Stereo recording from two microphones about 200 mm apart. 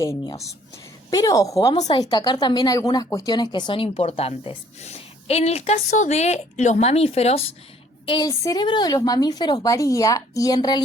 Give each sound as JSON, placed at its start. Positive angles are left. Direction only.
{"t": 0.0, "sound": "a woman's voice", "side_deg": 15}